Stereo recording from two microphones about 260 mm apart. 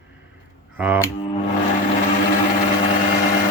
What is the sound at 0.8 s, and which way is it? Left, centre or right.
Speech, centre.